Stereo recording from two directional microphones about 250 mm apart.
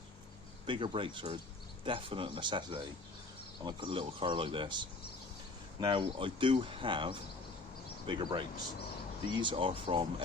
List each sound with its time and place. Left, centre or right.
0.7 s speech: centre
5.8 s speech: centre